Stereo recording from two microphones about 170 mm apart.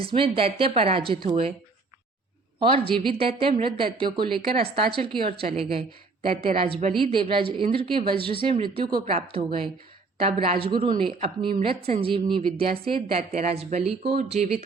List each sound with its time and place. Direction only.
0.0 s a woman's voice: 30° right (ahead or behind)
2.6 s a woman's voice: 30° right (ahead or behind)